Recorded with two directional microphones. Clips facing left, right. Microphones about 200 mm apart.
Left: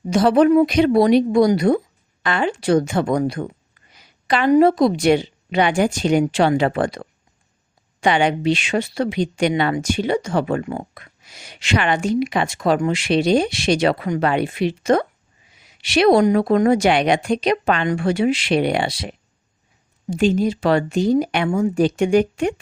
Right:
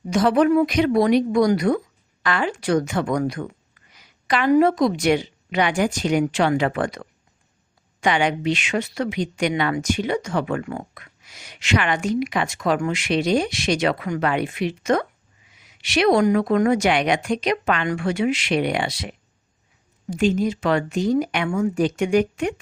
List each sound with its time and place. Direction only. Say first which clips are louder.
0.1 s a woman's voice: left 3 dB; 30° left (ahead or behind)